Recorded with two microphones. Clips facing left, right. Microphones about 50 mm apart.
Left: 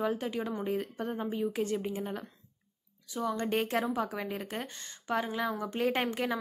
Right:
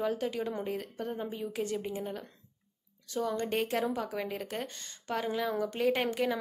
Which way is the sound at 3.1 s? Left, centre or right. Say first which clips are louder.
Even; left.